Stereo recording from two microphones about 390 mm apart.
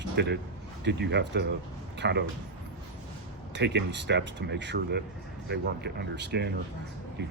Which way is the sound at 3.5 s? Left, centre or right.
Right.